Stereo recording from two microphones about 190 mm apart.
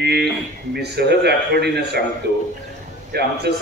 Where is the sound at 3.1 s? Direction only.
60° right (ahead or behind).